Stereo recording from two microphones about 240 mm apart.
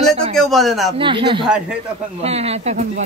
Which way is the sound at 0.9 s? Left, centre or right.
Right.